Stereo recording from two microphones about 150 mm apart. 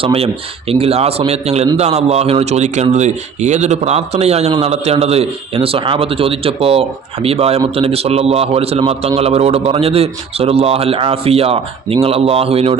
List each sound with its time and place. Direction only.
0.0 s a man's voice: 40° right (ahead or behind)